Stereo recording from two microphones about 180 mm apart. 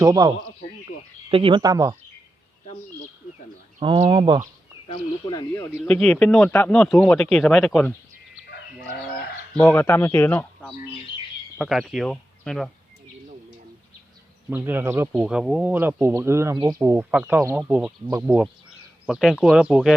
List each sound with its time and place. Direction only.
0.0 s speech: 20° right (ahead or behind)
3.8 s speech: 30° right (ahead or behind)
4.9 s speech: 25° left (ahead or behind)
5.8 s speech: 5° left (ahead or behind)
9.6 s speech: 10° left (ahead or behind)
11.5 s speech: 5° right (ahead or behind)
14.5 s speech: 10° right (ahead or behind)